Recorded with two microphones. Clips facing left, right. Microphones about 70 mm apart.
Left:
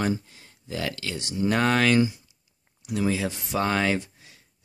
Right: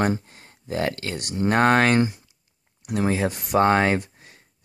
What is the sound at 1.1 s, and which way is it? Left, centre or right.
Speech, right.